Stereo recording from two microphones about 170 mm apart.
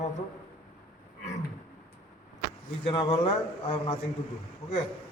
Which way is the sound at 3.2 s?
35° left (ahead or behind).